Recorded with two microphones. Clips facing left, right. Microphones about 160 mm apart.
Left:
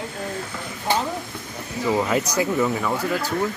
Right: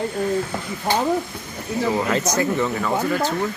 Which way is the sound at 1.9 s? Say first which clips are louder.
Left 2 dB; 10° left (ahead or behind).